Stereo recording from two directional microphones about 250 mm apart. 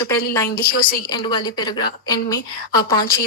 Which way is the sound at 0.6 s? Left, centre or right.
Left.